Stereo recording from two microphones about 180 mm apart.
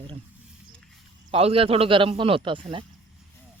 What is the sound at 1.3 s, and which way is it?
Speech, 35° right (ahead or behind).